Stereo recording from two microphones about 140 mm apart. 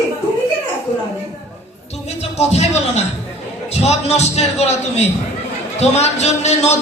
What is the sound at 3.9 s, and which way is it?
Music, 50° left (ahead or behind).